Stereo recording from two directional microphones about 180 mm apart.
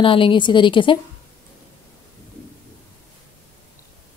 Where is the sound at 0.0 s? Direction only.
30° left (ahead or behind).